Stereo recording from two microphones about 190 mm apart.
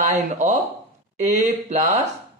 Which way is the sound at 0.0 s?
40° right (ahead or behind).